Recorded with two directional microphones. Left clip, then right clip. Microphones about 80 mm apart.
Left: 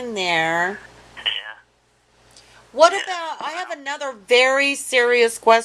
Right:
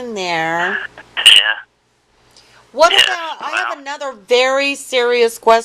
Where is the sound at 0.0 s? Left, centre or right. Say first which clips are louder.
Right 2 dB; centre.